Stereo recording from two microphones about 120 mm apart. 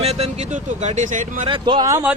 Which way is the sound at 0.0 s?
60° right (ahead or behind).